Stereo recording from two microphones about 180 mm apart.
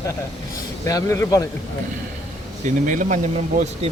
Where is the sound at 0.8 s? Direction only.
15° left (ahead or behind).